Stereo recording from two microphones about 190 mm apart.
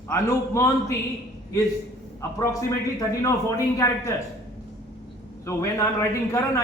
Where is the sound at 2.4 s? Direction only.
15° left (ahead or behind).